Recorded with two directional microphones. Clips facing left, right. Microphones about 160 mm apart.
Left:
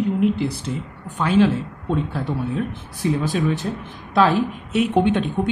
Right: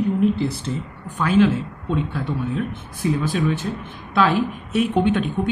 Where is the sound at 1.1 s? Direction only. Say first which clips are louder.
Even; 30° left (ahead or behind).